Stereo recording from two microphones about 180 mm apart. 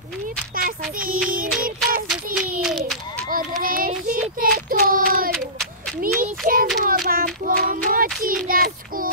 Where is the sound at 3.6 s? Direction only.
55° right (ahead or behind).